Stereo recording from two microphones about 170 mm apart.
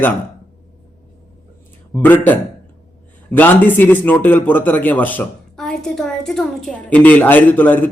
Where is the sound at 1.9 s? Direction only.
10° left (ahead or behind).